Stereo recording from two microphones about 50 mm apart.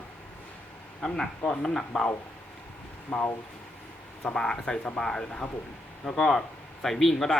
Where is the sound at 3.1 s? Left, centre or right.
Left; by 7.4 s centre.